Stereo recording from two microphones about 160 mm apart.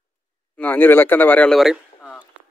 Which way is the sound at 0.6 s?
10° left (ahead or behind).